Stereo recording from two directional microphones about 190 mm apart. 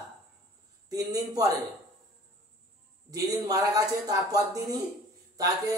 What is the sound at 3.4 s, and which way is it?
A man's voice, 20° right (ahead or behind).